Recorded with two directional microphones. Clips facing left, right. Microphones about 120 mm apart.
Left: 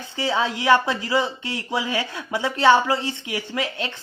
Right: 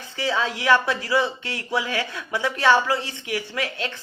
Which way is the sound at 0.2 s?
20° left (ahead or behind).